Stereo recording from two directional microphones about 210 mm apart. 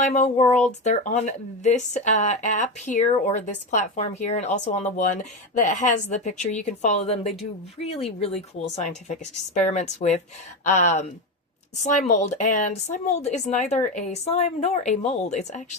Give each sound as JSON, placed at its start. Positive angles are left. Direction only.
{"t": 0.0, "sound": "speech", "side_deg": 35}